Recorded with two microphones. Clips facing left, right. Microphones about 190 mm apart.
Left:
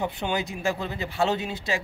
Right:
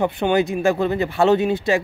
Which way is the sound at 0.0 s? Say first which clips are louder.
Right 10 dB; 60° right (ahead or behind).